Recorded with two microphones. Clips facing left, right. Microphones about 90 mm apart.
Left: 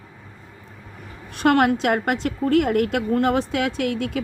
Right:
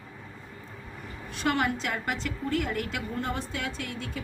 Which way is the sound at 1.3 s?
65° left (ahead or behind).